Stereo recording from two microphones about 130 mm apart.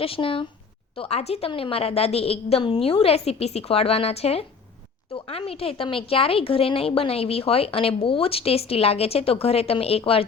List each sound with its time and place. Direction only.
0.0 s a woman's voice: 45° left (ahead or behind)